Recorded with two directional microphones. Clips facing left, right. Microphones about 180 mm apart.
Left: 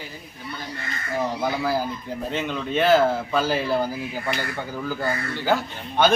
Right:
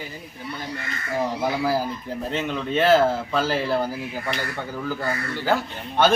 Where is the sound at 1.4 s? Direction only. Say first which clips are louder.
Right 2 dB; 5° right (ahead or behind).